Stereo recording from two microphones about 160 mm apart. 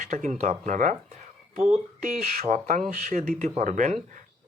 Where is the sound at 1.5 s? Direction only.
40° right (ahead or behind).